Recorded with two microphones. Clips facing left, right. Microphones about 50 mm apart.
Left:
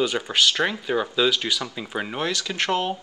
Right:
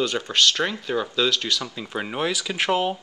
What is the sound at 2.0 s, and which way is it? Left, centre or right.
Speech, centre.